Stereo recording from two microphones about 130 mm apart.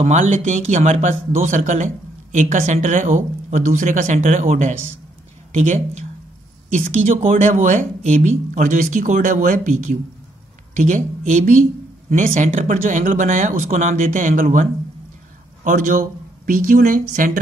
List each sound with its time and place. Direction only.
0.0 s speech: 65° right (ahead or behind)
2.3 s speech: 65° right (ahead or behind)
7.2 s speech: 65° right (ahead or behind); by 17.4 s 90° right